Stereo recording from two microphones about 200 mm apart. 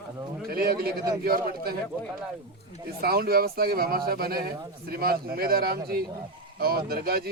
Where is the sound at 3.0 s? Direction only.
50° right (ahead or behind).